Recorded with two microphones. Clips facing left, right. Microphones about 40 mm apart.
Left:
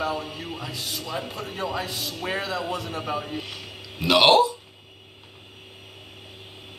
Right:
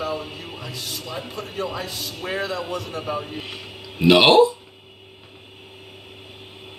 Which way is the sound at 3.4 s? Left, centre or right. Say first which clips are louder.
Right 3 dB; right.